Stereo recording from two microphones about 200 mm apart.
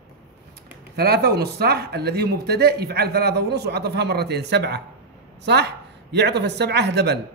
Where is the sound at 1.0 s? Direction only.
55° right (ahead or behind).